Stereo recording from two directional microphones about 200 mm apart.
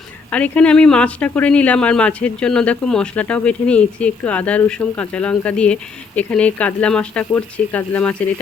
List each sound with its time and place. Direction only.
0.3 s speech: 5° left (ahead or behind)